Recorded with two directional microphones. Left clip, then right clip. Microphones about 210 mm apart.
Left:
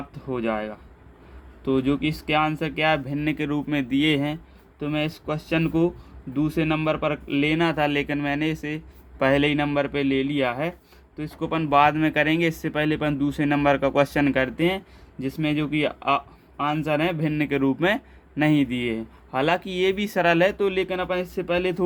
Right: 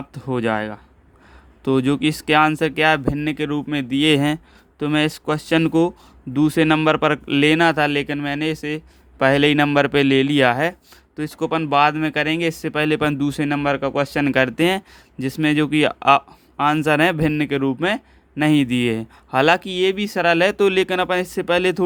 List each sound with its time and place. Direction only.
0.1 s speech: 50° right (ahead or behind)